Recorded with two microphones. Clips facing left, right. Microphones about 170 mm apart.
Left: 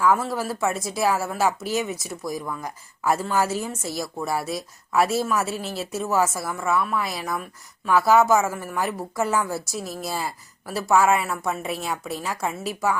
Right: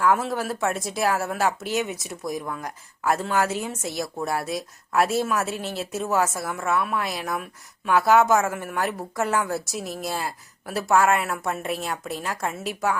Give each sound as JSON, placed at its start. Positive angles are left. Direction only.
{"t": 0.0, "sound": "a woman's voice", "side_deg": 0}